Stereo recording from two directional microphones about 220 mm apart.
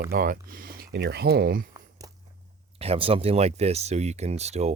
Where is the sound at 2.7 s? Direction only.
25° right (ahead or behind).